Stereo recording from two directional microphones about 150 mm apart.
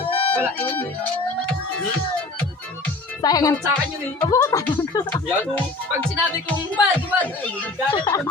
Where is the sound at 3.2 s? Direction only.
25° left (ahead or behind).